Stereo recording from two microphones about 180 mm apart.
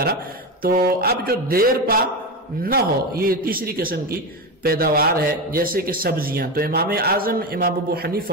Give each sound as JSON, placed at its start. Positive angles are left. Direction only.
{"t": 0.0, "sound": "a man's voice", "side_deg": -55}